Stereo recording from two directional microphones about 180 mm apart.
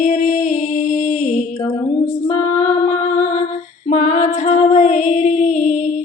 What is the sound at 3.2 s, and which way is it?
Music, 40° left (ahead or behind).